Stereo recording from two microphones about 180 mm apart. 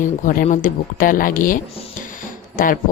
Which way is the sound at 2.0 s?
50° left (ahead or behind).